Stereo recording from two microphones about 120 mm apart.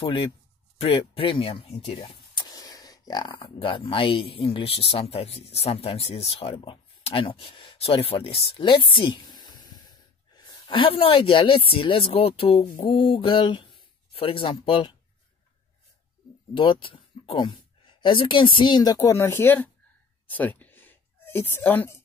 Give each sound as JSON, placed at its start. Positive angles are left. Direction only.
{"t": 0.0, "sound": "speech", "side_deg": 45}
{"t": 2.4, "sound": "speech", "side_deg": 30}
{"t": 16.5, "sound": "speech", "side_deg": 45}
{"t": 18.9, "sound": "speech", "side_deg": 20}
{"t": 20.2, "sound": "a sound", "side_deg": 15}